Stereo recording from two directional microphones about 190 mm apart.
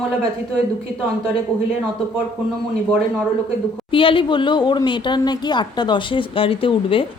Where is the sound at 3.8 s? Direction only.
25° left (ahead or behind).